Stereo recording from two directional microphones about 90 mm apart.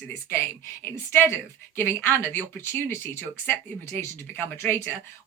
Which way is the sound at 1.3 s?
25° left (ahead or behind).